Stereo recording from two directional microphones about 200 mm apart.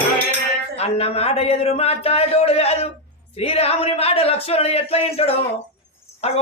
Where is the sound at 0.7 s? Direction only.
30° left (ahead or behind).